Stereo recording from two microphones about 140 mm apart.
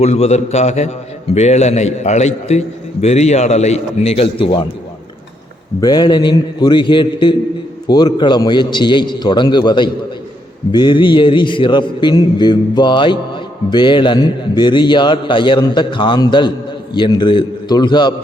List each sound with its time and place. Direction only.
0.0 s a man's voice: 50° left (ahead or behind)
5.8 s a man's voice: 30° left (ahead or behind)